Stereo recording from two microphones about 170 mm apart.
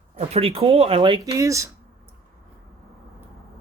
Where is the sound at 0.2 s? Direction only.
35° right (ahead or behind).